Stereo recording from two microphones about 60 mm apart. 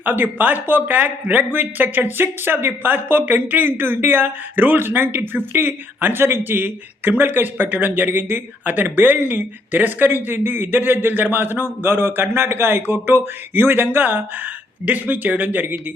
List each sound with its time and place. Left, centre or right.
0.0 s speech: right